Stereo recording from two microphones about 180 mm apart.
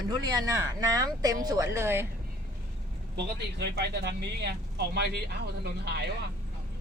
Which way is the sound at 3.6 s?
65° right (ahead or behind).